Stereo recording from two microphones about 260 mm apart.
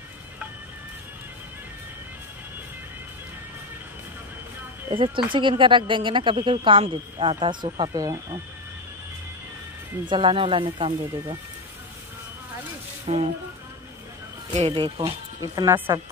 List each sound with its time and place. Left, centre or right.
4.9 s speech: centre
10.0 s speech: centre
13.0 s speech: right
14.5 s speech: right